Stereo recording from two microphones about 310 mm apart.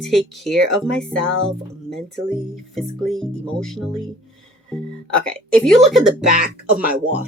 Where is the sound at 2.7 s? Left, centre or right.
Centre.